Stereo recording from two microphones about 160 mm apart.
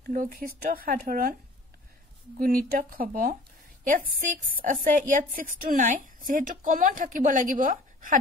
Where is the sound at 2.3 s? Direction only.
65° right (ahead or behind).